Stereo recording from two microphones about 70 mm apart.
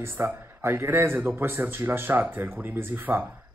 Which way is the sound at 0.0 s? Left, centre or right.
Right.